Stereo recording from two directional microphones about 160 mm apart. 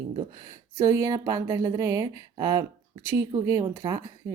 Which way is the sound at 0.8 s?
20° right (ahead or behind).